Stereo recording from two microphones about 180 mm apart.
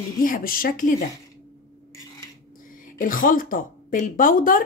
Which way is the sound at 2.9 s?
50° left (ahead or behind).